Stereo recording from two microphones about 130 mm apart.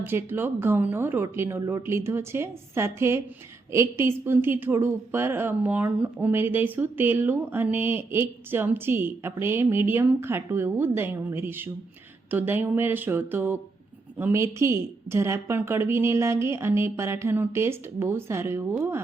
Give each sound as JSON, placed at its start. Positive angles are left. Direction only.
{"t": 0.0, "sound": "a woman's voice", "side_deg": -15}